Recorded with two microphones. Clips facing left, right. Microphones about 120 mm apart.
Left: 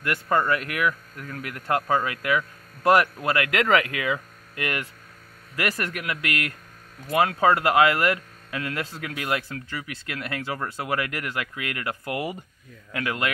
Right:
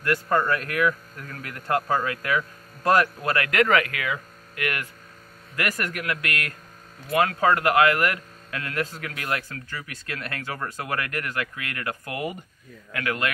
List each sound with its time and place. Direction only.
0.0 s a man's voice: 15° left (ahead or behind); by 2.0 s 5° right (ahead or behind)
2.0 s speech: 15° left (ahead or behind)
5.9 s a man's voice: 15° left (ahead or behind)